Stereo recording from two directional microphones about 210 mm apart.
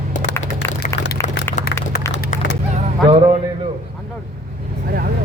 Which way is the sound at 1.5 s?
40° left (ahead or behind).